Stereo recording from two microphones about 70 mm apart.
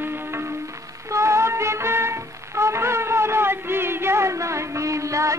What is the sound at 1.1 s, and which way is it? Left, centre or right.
Music, right.